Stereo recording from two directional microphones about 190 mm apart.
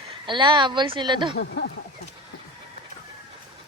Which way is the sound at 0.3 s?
25° right (ahead or behind).